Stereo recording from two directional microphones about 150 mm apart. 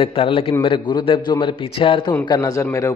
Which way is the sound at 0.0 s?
35° left (ahead or behind).